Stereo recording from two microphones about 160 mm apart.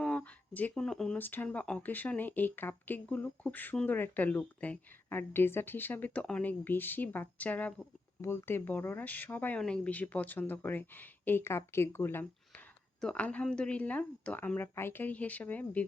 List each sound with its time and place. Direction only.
0.0 s speech: 5° left (ahead or behind)